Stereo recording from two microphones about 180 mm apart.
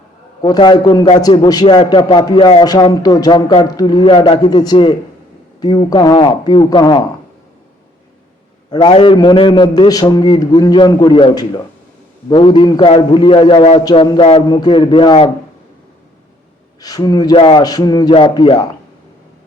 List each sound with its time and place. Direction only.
0.4 s a man's voice: 25° left (ahead or behind)
8.7 s a man's voice: 25° left (ahead or behind)
16.8 s a man's voice: 20° left (ahead or behind)